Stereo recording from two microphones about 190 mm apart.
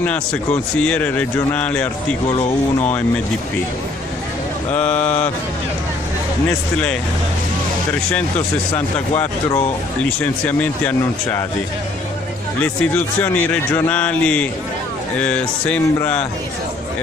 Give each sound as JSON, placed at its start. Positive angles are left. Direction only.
{"t": 0.0, "sound": "a man's voice", "side_deg": 5}
{"t": 2.3, "sound": "speech", "side_deg": 30}
{"t": 4.7, "sound": "a man's voice", "side_deg": 10}
{"t": 10.0, "sound": "a man's voice", "side_deg": 5}
{"t": 12.6, "sound": "a man's voice", "side_deg": 10}